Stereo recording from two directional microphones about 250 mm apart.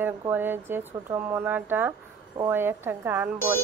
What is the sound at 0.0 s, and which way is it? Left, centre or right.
Speech, centre.